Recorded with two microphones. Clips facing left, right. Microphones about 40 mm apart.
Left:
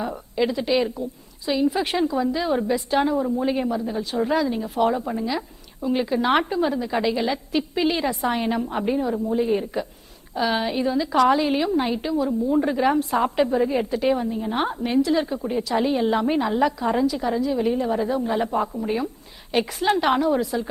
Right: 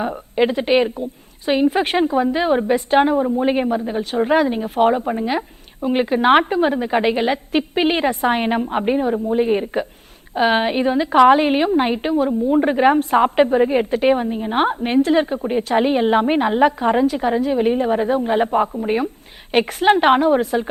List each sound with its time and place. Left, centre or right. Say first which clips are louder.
0.0 s a woman's voice: right 5 dB; right